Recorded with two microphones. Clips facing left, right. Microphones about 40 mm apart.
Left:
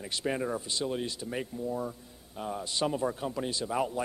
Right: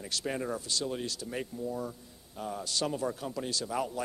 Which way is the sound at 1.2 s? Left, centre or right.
Centre.